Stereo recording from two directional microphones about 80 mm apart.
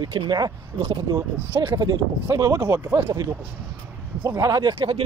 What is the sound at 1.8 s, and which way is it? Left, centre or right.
Speech, right.